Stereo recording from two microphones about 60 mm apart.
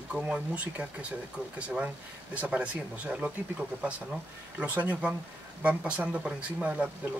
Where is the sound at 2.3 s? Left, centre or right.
Right.